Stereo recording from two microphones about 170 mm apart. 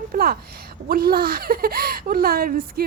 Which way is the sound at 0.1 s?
60° right (ahead or behind).